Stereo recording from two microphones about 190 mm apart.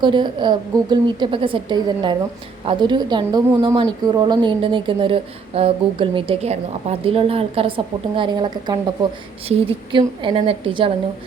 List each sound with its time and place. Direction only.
0.0 s speech: 25° right (ahead or behind)